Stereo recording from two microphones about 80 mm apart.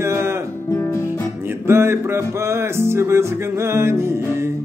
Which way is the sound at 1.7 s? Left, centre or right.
Right.